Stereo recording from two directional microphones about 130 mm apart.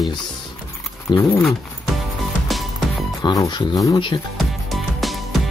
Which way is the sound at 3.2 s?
30° left (ahead or behind).